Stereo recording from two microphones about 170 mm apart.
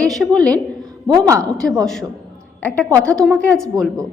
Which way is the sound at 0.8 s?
25° right (ahead or behind).